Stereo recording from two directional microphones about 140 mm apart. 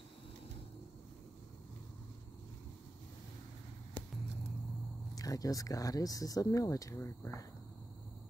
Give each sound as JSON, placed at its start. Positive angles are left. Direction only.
{"t": 5.1, "sound": "speech", "side_deg": 25}